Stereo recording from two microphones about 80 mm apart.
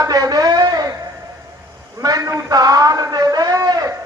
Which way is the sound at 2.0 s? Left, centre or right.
Right.